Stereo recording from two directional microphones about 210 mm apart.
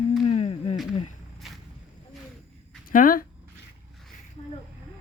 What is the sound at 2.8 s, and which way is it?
Speech, 40° left (ahead or behind).